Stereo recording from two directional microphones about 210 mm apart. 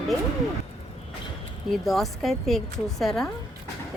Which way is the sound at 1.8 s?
Centre (ahead or behind).